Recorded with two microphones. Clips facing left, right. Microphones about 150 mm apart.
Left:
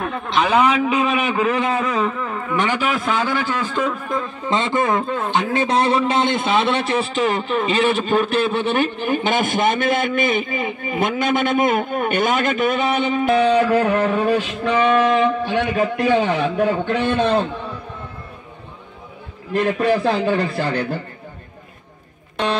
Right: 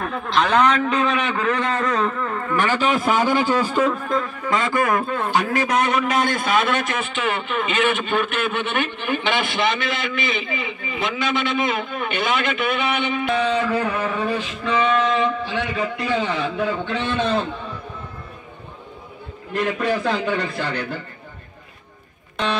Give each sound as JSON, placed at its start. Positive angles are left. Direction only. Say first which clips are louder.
{"t": 0.0, "sound": "a man's voice", "louder": "left 1 dB", "side_deg": 0}
{"t": 2.5, "sound": "a man's voice", "louder": "left 1 dB", "side_deg": 20}
{"t": 2.8, "sound": "speech", "louder": "right 2 dB", "side_deg": 0}
{"t": 3.1, "sound": "a man's voice", "louder": "right 3 dB", "side_deg": -15}
{"t": 4.1, "sound": "a man's voice", "louder": "even", "side_deg": 25}
{"t": 13.5, "sound": "music", "louder": "left 5 dB", "side_deg": 60}
{"t": 14.2, "sound": "a man's voice", "louder": "left 5 dB", "side_deg": 45}
{"t": 19.8, "sound": "a man's voice", "louder": "left 5 dB", "side_deg": 30}